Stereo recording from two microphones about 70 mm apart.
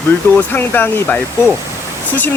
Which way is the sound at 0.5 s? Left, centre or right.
Left.